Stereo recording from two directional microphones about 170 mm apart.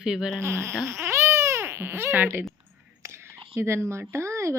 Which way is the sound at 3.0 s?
15° right (ahead or behind).